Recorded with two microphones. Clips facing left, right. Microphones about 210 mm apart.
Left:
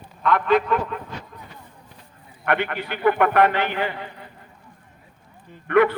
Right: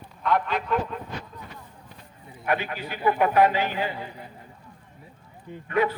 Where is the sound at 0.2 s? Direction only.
80° left.